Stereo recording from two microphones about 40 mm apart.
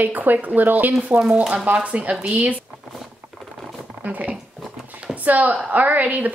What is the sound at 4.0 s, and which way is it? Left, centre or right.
Speech, right.